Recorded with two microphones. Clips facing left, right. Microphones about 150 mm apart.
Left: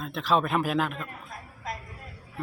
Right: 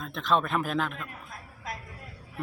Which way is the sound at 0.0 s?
5° left (ahead or behind).